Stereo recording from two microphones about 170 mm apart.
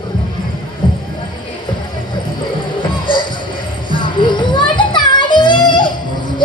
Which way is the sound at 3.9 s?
30° left (ahead or behind).